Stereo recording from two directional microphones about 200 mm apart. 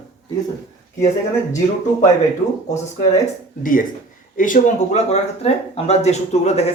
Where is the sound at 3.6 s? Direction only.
40° left (ahead or behind).